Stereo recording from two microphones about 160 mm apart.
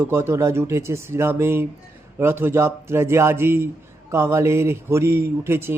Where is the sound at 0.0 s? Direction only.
15° right (ahead or behind).